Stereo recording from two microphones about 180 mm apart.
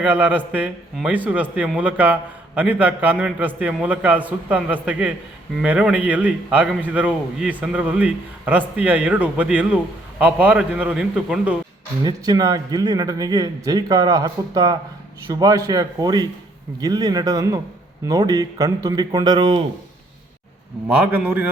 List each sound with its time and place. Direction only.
0.0 s a man's voice: 10° right (ahead or behind)
12.0 s a man's voice: 20° right (ahead or behind)
20.8 s a man's voice: 10° right (ahead or behind)